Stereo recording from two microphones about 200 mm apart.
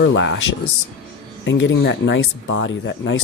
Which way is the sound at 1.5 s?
70° left (ahead or behind).